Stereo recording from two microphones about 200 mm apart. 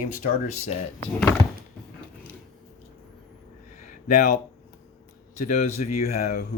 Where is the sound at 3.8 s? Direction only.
45° left (ahead or behind).